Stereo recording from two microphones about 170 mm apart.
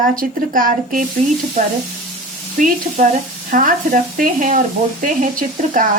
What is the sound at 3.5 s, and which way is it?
Speech, 50° right (ahead or behind).